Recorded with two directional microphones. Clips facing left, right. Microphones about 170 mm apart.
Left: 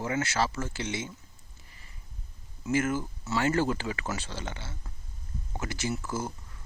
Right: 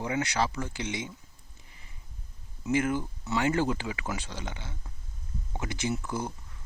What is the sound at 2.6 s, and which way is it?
Speech, 20° right (ahead or behind).